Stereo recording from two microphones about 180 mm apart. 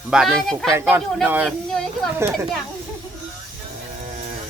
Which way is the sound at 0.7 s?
15° right (ahead or behind).